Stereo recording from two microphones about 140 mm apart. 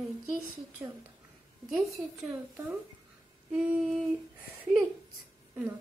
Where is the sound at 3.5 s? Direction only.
10° right (ahead or behind).